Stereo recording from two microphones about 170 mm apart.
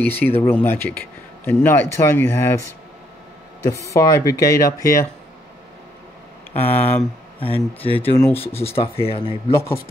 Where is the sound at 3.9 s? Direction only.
20° left (ahead or behind).